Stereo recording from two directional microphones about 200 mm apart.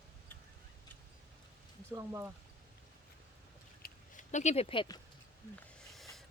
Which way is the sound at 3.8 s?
40° left (ahead or behind).